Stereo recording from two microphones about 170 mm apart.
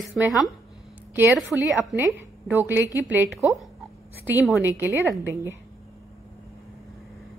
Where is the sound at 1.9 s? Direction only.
10° right (ahead or behind).